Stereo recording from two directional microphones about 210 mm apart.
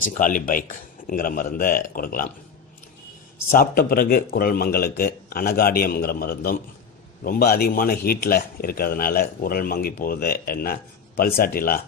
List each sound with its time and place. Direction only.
0.2 s speech: 40° left (ahead or behind)
3.5 s speech: 45° left (ahead or behind)